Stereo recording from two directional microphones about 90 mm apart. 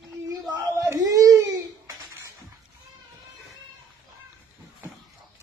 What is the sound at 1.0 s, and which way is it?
Crying, 40° right (ahead or behind).